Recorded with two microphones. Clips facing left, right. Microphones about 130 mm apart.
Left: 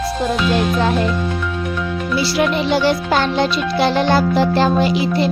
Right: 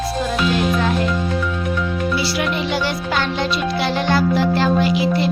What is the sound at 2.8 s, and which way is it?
Music, 35° left (ahead or behind).